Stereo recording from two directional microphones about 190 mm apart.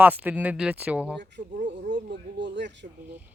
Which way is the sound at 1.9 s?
65° right (ahead or behind).